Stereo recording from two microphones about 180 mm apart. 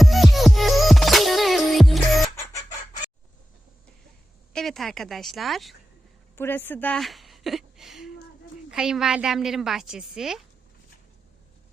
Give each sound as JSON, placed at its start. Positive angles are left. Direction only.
{"t": 0.0, "sound": "music", "side_deg": 0}
{"t": 4.5, "sound": "a woman's voice", "side_deg": 0}
{"t": 6.3, "sound": "a woman's voice", "side_deg": 10}